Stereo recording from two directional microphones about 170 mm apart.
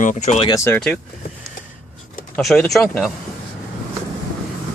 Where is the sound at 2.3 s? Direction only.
5° left (ahead or behind).